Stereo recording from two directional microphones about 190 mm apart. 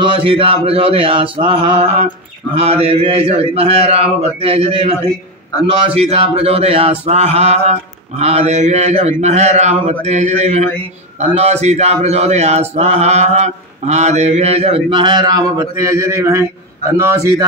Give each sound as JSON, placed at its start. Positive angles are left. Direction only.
{"t": 0.0, "sound": "mantra", "side_deg": -25}
{"t": 2.5, "sound": "a man's voice", "side_deg": -30}